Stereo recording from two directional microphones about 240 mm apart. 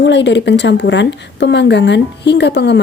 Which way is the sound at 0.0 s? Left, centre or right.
Left.